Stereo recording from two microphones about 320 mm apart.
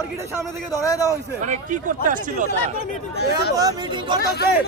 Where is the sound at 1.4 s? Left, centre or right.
Right.